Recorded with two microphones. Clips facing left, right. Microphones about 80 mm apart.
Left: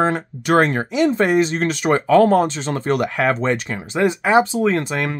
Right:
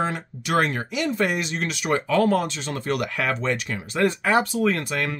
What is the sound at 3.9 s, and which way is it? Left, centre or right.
Speech, centre.